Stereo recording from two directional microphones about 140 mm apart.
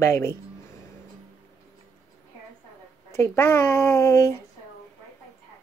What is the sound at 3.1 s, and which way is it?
Speech, 20° left (ahead or behind).